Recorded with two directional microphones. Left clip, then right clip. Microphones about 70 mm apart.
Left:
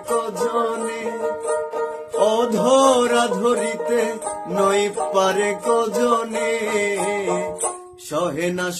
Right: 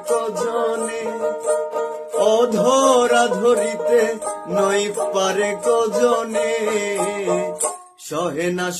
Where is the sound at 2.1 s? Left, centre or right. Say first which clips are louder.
Right 2 dB; left.